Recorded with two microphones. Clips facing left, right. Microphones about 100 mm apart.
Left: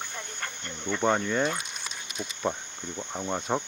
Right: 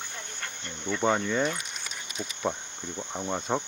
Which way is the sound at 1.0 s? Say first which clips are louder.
Even; centre (ahead or behind).